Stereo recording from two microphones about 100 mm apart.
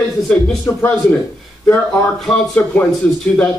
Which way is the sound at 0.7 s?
35° left (ahead or behind).